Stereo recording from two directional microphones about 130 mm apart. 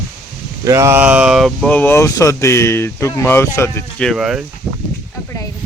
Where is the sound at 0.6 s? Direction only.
25° right (ahead or behind); by 1.6 s centre (ahead or behind).